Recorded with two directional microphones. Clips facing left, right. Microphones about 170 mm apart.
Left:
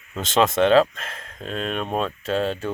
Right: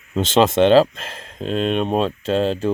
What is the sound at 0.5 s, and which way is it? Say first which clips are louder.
Speech: right 3 dB; 30° right (ahead or behind).